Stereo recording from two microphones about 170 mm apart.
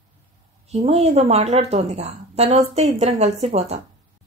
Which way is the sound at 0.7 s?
40° right (ahead or behind).